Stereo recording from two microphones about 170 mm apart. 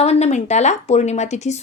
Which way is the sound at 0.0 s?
40° left (ahead or behind).